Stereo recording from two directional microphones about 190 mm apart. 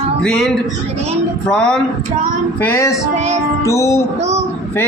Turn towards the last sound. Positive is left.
turn(degrees=15)  # may be behind; listen again after turning